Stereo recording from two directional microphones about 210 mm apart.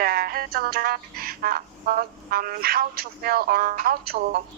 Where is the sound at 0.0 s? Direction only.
45° right (ahead or behind).